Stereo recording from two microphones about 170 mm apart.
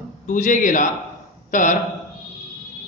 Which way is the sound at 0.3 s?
50° left (ahead or behind).